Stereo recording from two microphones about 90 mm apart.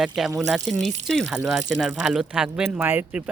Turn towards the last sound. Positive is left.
turn(degrees=-20)  # may be behind; listen again after turning